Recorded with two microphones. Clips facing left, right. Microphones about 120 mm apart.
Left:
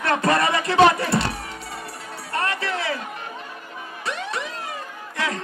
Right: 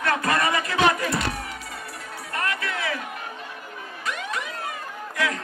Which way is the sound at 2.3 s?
30° left (ahead or behind).